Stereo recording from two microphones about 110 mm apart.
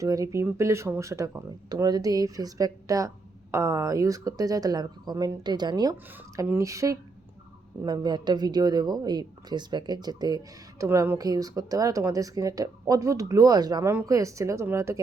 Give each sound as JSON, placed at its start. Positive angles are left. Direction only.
{"t": 0.0, "sound": "speech", "side_deg": -30}
{"t": 7.9, "sound": "speech", "side_deg": -40}
{"t": 10.8, "sound": "speech", "side_deg": -20}
{"t": 11.2, "sound": "speech", "side_deg": -35}
{"t": 13.8, "sound": "speech", "side_deg": -25}